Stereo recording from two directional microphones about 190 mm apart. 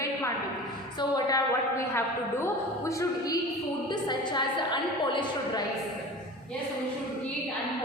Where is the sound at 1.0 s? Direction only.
20° left (ahead or behind).